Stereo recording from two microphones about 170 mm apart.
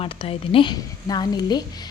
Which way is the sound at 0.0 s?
35° left (ahead or behind).